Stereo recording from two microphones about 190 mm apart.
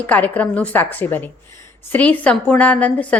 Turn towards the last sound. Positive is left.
turn(degrees=5)  # may be behind; listen again after turning